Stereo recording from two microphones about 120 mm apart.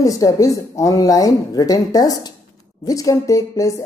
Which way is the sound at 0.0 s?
30° left (ahead or behind).